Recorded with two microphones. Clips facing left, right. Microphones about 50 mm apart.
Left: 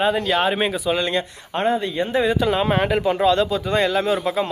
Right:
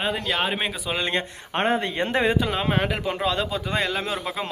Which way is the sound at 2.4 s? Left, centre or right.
Centre.